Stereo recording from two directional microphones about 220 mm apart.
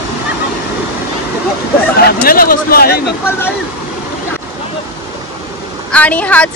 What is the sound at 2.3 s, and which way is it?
Speech, 40° left (ahead or behind).